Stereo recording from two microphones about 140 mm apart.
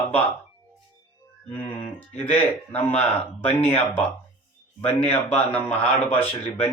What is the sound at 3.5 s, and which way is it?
Speech, 45° left (ahead or behind).